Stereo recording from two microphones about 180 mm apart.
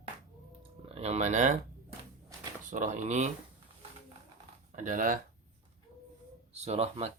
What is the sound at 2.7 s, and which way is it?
Speech, 40° right (ahead or behind).